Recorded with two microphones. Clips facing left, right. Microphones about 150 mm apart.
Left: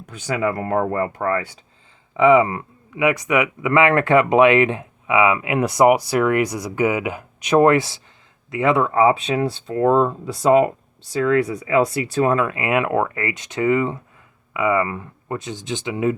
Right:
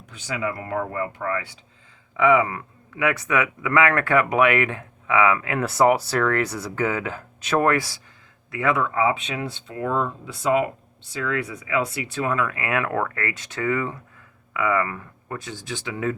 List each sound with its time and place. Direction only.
0.1 s speech: 50° left (ahead or behind)
2.1 s speech: 25° left (ahead or behind)
3.0 s speech: 15° left (ahead or behind); by 12.5 s 35° left (ahead or behind)
12.5 s speech: 20° left (ahead or behind)